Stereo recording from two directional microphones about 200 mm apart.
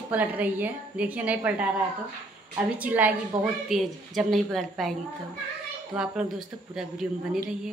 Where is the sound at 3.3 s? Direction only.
25° right (ahead or behind).